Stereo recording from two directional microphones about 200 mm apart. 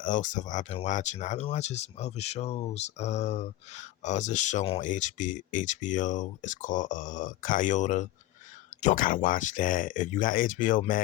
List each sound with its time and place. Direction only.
0.0 s speech: 40° left (ahead or behind)